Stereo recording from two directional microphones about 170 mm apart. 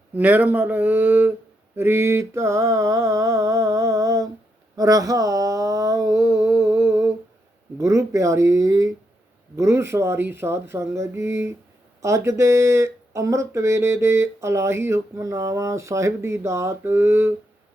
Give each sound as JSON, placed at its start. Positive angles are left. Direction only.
{"t": 0.1, "sound": "speech", "side_deg": -10}
{"t": 4.8, "sound": "a sound", "side_deg": -20}
{"t": 7.8, "sound": "speech", "side_deg": -20}